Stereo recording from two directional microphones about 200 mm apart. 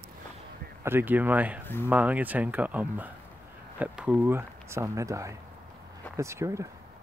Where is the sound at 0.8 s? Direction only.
10° right (ahead or behind).